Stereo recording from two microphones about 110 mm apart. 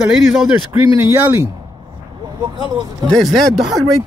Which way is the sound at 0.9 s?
25° right (ahead or behind).